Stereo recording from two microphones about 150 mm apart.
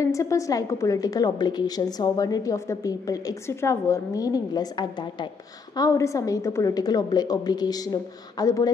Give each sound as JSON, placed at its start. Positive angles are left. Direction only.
{"t": 0.0, "sound": "a woman's voice", "side_deg": 20}
{"t": 5.8, "sound": "a woman's voice", "side_deg": 20}